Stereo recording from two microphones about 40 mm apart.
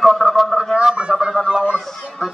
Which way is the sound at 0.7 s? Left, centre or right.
Right.